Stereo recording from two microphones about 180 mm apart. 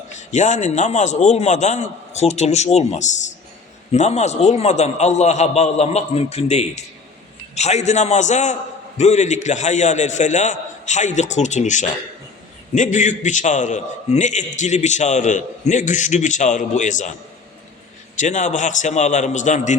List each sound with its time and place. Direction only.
0.1 s a man's voice: 40° left (ahead or behind)
18.2 s a man's voice: 40° left (ahead or behind)